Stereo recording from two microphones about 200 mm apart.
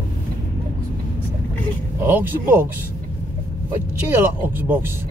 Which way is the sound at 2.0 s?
10° right (ahead or behind).